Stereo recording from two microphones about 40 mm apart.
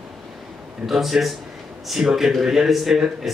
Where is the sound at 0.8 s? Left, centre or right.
Centre.